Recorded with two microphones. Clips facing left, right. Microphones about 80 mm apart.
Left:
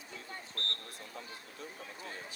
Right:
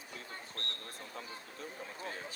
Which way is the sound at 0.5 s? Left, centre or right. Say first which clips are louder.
Left 4 dB; centre.